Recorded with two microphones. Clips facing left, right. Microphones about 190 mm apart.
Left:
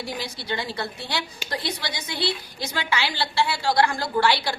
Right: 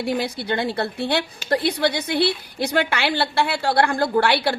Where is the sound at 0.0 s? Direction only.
60° right (ahead or behind).